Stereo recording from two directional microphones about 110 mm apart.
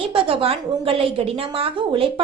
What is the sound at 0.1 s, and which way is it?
A woman's voice, 55° right (ahead or behind).